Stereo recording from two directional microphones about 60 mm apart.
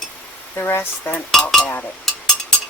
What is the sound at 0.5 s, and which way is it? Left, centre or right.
Speech, left.